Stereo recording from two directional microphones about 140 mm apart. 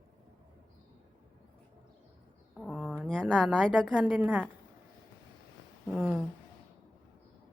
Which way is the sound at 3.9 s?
5° right (ahead or behind).